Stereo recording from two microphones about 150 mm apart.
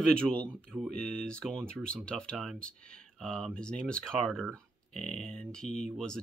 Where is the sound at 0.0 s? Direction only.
5° left (ahead or behind).